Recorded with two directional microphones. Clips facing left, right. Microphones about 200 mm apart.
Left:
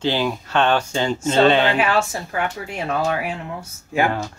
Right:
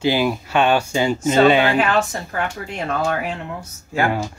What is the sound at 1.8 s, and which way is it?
Speech, 5° left (ahead or behind).